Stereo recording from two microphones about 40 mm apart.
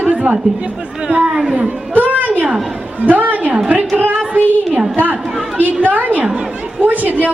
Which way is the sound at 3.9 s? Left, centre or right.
Right.